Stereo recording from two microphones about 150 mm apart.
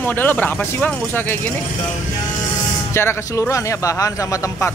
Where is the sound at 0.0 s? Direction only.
15° left (ahead or behind).